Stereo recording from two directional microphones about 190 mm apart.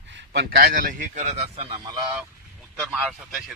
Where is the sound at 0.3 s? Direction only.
55° right (ahead or behind); by 1.8 s 30° right (ahead or behind).